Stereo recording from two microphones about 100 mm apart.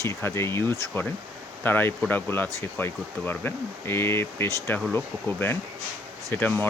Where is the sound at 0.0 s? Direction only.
25° left (ahead or behind).